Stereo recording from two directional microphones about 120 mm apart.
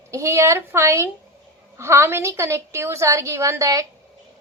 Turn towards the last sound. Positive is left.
turn(degrees=-25)  # may be behind; listen again after turning